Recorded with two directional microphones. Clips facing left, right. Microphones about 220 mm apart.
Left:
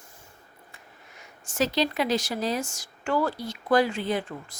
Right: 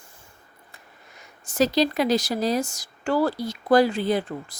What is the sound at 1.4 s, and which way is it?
A woman's voice, 40° right (ahead or behind).